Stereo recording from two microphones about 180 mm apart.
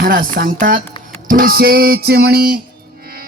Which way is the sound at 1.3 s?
55° right (ahead or behind).